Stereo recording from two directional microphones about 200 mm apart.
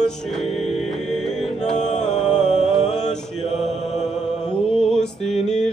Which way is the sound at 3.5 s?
35° left (ahead or behind).